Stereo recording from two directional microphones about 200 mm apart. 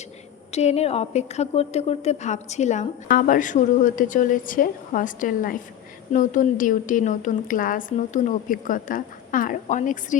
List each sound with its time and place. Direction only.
0.5 s a woman's voice: 35° left (ahead or behind)